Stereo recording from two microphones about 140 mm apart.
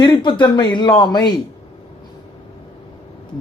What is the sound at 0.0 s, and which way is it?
Speech, 30° left (ahead or behind).